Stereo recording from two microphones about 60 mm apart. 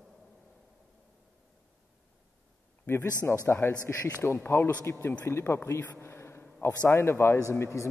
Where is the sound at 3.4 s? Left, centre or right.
Left.